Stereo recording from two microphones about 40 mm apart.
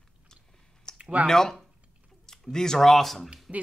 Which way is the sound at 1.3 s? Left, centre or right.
Centre.